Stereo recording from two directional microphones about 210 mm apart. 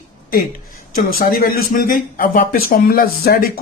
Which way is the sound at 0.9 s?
45° left (ahead or behind).